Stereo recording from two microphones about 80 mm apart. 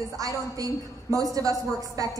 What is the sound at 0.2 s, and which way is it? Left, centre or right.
A woman's voice, right.